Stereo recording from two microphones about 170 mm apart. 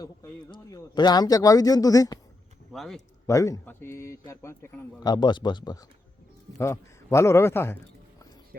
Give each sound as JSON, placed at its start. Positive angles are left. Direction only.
{"t": 0.0, "sound": "a man's voice", "side_deg": 20}
{"t": 2.7, "sound": "speech", "side_deg": 0}
{"t": 3.2, "sound": "a man's voice", "side_deg": 20}